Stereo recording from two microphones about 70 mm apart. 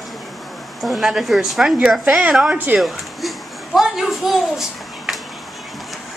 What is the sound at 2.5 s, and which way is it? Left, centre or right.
Speech, centre.